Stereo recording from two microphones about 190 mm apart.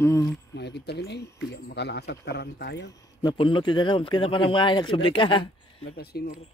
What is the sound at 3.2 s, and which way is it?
A man's voice, 25° left (ahead or behind).